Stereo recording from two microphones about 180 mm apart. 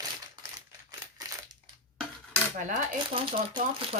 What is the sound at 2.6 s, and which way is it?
Speech, 45° right (ahead or behind).